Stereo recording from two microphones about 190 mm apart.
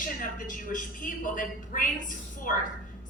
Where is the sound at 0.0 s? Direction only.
45° left (ahead or behind).